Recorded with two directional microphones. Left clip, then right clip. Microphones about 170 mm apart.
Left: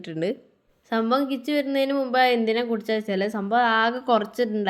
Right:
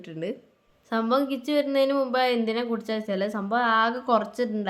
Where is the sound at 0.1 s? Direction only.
25° left (ahead or behind).